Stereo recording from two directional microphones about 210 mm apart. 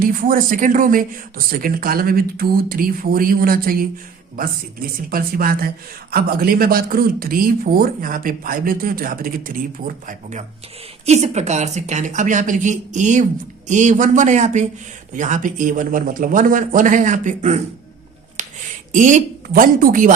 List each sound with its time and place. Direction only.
0.0 s speech: 40° right (ahead or behind)
18.4 s a sound: 35° right (ahead or behind)
18.9 s speech: 35° right (ahead or behind)